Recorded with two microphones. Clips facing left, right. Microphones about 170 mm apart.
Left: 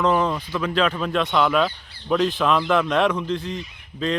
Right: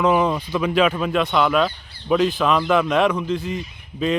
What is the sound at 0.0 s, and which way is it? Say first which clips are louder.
Speech: right 2 dB; 10° right (ahead or behind).